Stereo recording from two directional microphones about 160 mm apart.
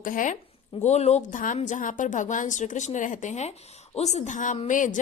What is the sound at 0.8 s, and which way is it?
A woman's voice, 45° left (ahead or behind).